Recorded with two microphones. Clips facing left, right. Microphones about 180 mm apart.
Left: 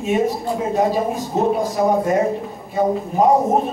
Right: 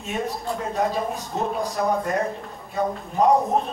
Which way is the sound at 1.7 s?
20° left (ahead or behind).